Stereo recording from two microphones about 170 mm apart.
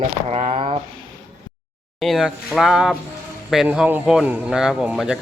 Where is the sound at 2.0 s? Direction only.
Centre (ahead or behind).